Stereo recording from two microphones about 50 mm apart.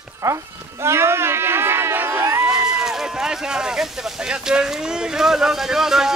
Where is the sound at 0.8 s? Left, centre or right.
Right.